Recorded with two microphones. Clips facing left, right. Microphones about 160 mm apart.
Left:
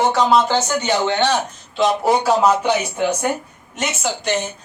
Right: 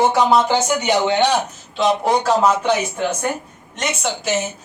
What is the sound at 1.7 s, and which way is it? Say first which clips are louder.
Speech: left 1 dB; 5° left (ahead or behind).